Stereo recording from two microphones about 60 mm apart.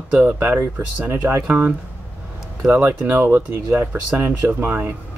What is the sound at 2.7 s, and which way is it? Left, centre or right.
Speech, right.